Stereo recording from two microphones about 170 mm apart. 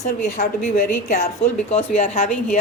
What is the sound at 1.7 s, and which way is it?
Speech, 40° left (ahead or behind).